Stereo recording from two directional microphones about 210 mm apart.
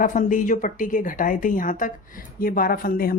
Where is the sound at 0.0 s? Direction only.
40° left (ahead or behind).